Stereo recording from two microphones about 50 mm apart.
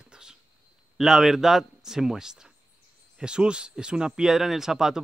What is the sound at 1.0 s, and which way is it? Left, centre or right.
Speech, centre.